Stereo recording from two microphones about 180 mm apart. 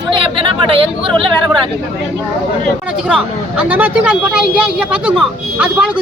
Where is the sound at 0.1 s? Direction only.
30° right (ahead or behind).